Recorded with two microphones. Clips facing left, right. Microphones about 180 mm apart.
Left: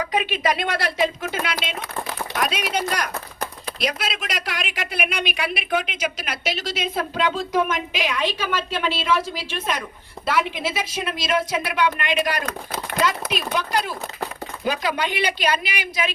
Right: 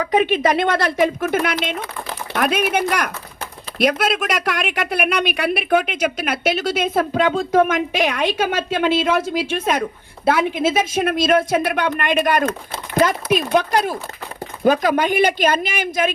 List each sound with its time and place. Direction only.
0.1 s a woman's voice: 50° right (ahead or behind)